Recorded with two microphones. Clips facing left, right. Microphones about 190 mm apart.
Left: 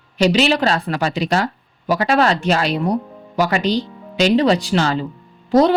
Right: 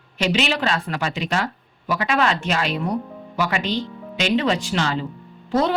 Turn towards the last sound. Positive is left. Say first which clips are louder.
# left 7 dB
turn(degrees=35)  # may be behind; listen again after turning